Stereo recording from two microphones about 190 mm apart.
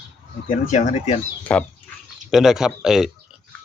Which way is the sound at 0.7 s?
40° left (ahead or behind).